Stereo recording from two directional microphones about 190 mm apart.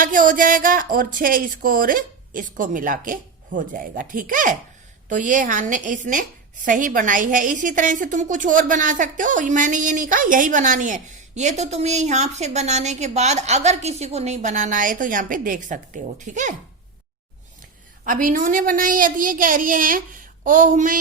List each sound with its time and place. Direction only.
0.0 s a woman's voice: 45° right (ahead or behind)
18.0 s a woman's voice: 45° right (ahead or behind)